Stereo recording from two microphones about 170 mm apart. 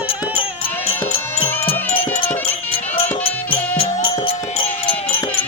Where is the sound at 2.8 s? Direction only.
10° left (ahead or behind).